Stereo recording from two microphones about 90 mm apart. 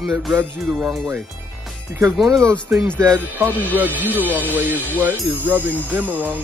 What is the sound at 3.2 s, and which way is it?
Speech, 20° right (ahead or behind).